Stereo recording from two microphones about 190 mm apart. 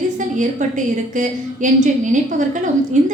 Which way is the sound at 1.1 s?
40° right (ahead or behind).